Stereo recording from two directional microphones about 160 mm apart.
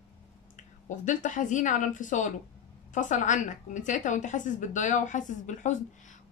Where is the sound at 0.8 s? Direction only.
50° left (ahead or behind).